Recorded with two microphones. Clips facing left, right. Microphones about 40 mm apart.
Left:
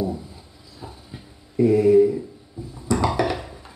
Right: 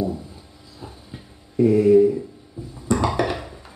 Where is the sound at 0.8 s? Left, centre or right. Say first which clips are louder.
Even; centre.